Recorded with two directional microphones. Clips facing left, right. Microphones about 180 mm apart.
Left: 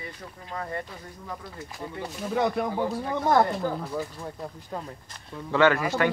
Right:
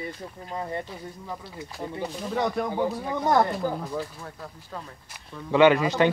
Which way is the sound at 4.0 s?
15° left (ahead or behind).